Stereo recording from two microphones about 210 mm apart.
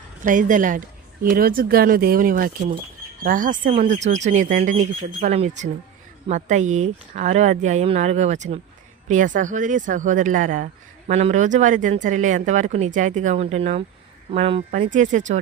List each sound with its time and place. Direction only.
0.3 s speech: 40° right (ahead or behind)